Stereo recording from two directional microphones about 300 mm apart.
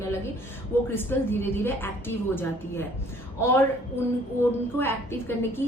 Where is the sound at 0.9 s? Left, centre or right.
Centre.